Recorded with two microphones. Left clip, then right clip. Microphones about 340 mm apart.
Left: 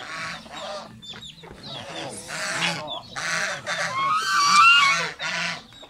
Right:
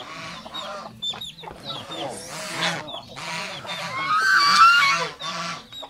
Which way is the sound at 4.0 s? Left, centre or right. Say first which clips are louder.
Right 4 dB; centre.